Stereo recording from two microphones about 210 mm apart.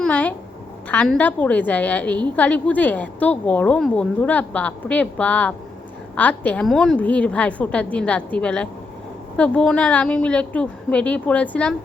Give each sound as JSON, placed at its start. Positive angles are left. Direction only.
{"t": 0.0, "sound": "a child's voice", "side_deg": 5}